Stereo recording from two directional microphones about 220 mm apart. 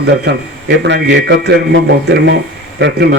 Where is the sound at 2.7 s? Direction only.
55° right (ahead or behind).